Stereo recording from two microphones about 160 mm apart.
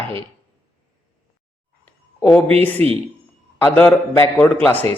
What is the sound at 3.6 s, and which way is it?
Speech, 15° left (ahead or behind).